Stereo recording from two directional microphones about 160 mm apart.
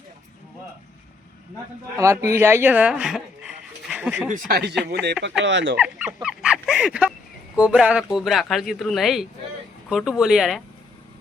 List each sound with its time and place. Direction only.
2.0 s speech: 15° right (ahead or behind)
4.3 s speech: 65° right (ahead or behind)
4.9 s speech: 90° right
5.7 s speech: 5° right (ahead or behind)
6.2 s a sound: 5° right (ahead or behind)
7.5 s speech: 5° right (ahead or behind)